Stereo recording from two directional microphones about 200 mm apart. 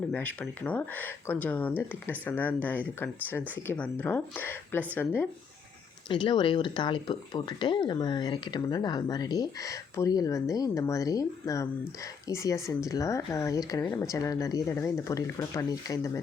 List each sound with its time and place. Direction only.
0.1 s speech: 5° left (ahead or behind)
6.1 s speech: 25° left (ahead or behind)